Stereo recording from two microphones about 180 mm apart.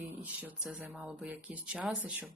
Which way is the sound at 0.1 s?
10° right (ahead or behind).